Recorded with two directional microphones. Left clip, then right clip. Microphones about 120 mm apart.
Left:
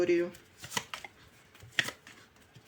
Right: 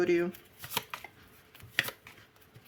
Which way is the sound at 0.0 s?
60° right (ahead or behind).